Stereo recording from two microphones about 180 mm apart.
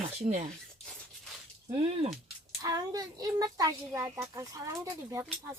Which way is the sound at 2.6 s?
20° right (ahead or behind).